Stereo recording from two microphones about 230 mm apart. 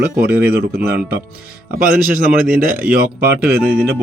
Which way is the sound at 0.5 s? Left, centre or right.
Right.